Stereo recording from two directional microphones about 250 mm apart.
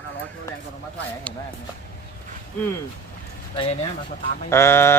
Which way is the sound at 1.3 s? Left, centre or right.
Centre.